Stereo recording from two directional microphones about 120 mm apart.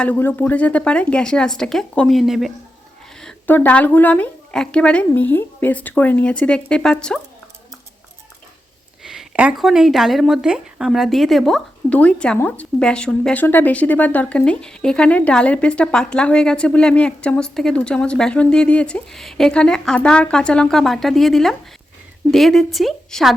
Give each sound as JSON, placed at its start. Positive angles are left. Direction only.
{"t": 0.0, "sound": "speech", "side_deg": 15}
{"t": 3.4, "sound": "speech", "side_deg": 15}
{"t": 9.0, "sound": "speech", "side_deg": -5}